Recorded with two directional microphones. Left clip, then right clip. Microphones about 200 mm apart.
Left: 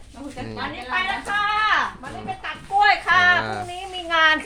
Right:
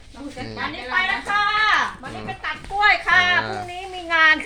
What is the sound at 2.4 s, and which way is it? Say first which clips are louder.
Speech: right 7 dB; 25° right (ahead or behind).